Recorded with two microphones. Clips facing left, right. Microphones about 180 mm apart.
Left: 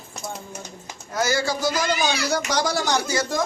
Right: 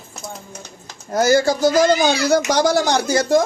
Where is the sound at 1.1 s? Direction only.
45° right (ahead or behind).